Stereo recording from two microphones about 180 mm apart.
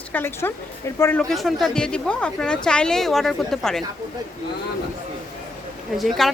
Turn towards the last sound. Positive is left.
turn(degrees=0)  # may be behind; listen again after turning